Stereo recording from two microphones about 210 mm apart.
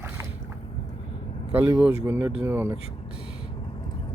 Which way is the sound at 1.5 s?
5° right (ahead or behind).